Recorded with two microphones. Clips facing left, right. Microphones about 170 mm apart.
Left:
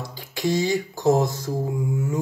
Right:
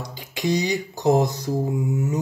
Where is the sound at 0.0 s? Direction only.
20° right (ahead or behind).